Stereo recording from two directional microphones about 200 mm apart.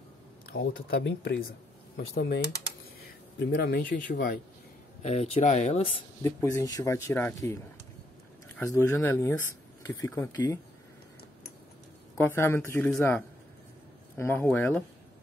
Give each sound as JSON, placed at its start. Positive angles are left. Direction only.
{"t": 0.6, "sound": "speech", "side_deg": 55}
{"t": 3.5, "sound": "speech", "side_deg": 50}
{"t": 5.0, "sound": "speech", "side_deg": 35}
{"t": 6.2, "sound": "speech", "side_deg": 15}
{"t": 12.2, "sound": "speech", "side_deg": 10}